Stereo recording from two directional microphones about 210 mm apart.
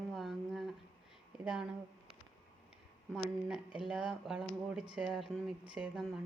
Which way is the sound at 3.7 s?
5° right (ahead or behind).